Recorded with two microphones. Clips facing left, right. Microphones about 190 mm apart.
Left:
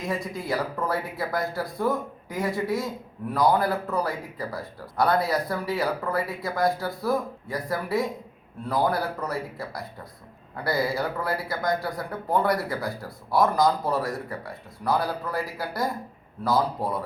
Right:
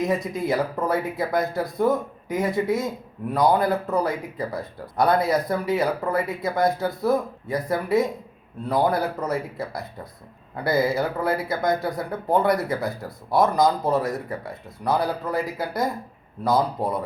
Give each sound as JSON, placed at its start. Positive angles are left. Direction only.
{"t": 0.0, "sound": "speech", "side_deg": -20}